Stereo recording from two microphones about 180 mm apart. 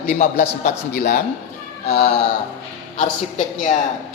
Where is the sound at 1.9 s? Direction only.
35° left (ahead or behind).